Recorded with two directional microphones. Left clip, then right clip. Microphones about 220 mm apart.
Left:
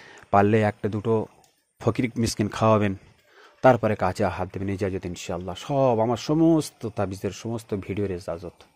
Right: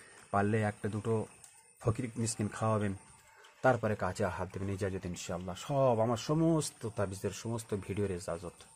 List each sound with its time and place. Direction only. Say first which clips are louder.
0.3 s speech: left 12 dB; 35° left (ahead or behind)